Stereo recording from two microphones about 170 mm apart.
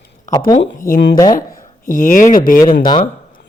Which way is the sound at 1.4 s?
50° left (ahead or behind).